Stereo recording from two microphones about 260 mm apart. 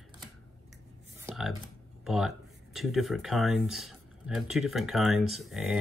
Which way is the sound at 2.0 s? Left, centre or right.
Centre.